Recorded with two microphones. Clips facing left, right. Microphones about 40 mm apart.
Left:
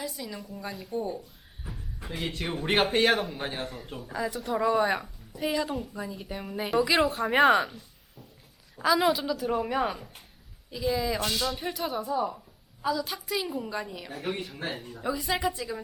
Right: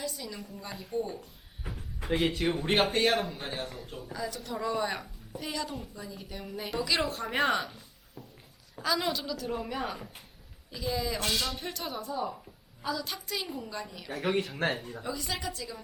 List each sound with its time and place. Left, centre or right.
0.0 s a woman's voice: centre
2.2 s speech: centre
2.6 s a woman's voice: centre
2.9 s a woman's voice: left
3.3 s a woman's voice: centre
8.8 s a woman's voice: centre
13.6 s a woman's voice: centre
14.1 s speech: right
15.0 s a woman's voice: centre